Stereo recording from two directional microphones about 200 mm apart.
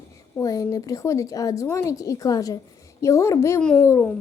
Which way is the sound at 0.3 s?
15° left (ahead or behind).